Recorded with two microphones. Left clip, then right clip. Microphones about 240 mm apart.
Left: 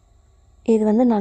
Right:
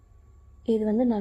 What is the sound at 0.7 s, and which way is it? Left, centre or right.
Speech, left.